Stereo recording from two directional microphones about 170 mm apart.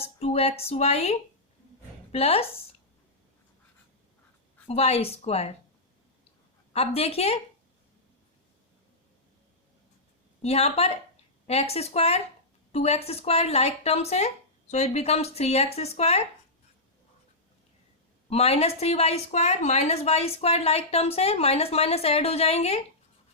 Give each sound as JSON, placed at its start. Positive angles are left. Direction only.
{"t": 0.0, "sound": "speech", "side_deg": 35}
{"t": 2.1, "sound": "speech", "side_deg": 35}
{"t": 4.7, "sound": "speech", "side_deg": 35}
{"t": 6.7, "sound": "speech", "side_deg": 35}
{"t": 10.4, "sound": "speech", "side_deg": 40}
{"t": 18.3, "sound": "speech", "side_deg": 35}